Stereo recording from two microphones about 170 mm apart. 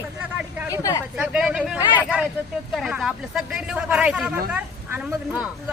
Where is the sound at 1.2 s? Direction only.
5° right (ahead or behind).